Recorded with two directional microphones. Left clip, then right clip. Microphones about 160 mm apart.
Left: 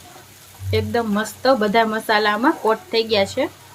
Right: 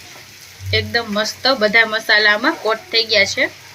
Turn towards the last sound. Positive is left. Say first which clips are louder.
# right 4 dB
turn(degrees=70)  # may be behind; listen again after turning